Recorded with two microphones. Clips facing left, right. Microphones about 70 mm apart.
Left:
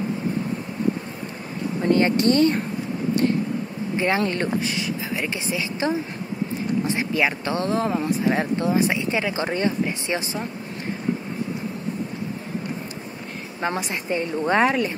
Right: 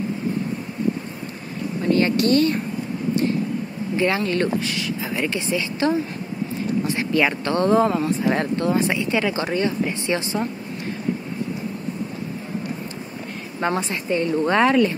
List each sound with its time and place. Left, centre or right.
1.9 s speech: left
4.0 s speech: left
7.1 s speech: centre
7.5 s speech: centre
8.4 s speech: centre
9.5 s speech: left
10.0 s speech: centre
13.6 s a woman's voice: centre
14.1 s speech: left
14.5 s speech: centre